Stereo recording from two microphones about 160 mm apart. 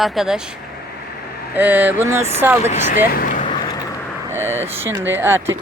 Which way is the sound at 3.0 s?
65° left (ahead or behind).